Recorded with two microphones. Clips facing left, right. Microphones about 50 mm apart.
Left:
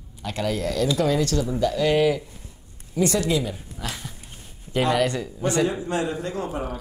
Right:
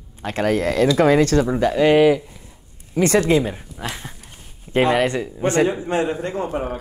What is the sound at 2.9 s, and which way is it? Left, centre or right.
A man's voice, right.